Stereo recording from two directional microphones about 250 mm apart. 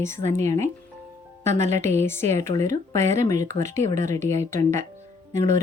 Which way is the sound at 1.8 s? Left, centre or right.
Centre.